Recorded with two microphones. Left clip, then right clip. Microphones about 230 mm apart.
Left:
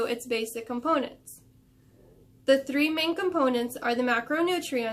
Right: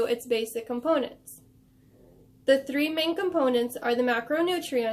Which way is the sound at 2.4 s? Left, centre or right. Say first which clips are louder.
Even; centre.